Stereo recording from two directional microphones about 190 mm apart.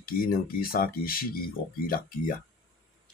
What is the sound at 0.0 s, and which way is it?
Speech, 50° left (ahead or behind).